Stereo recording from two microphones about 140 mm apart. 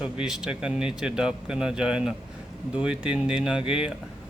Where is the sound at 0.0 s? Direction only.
5° right (ahead or behind).